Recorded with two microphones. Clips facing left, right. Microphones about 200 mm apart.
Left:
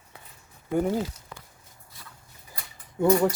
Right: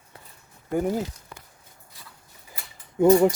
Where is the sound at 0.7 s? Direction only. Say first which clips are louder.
Even; 5° right (ahead or behind).